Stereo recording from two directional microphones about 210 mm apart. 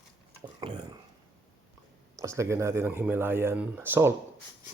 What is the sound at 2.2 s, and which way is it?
Speech, 15° right (ahead or behind).